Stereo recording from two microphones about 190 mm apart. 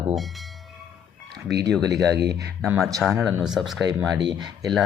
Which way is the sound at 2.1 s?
60° right (ahead or behind).